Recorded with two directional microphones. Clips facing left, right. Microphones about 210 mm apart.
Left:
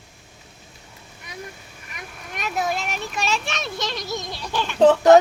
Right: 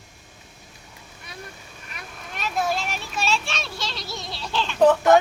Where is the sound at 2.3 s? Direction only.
15° left (ahead or behind).